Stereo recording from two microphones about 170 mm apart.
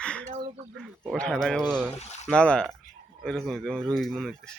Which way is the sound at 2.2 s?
5° left (ahead or behind).